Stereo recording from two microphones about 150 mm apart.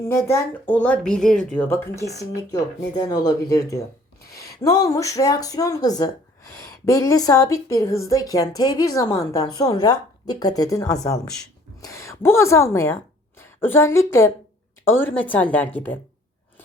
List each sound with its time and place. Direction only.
0.0 s a woman's voice: 20° left (ahead or behind)